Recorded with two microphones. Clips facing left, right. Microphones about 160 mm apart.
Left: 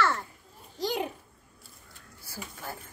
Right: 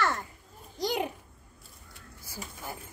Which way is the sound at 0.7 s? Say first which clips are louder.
Even; 10° right (ahead or behind).